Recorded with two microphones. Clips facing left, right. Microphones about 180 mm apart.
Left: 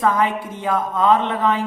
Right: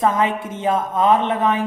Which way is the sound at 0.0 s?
20° right (ahead or behind).